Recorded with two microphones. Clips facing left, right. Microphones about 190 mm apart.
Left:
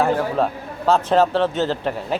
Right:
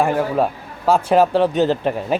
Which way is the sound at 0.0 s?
10° right (ahead or behind).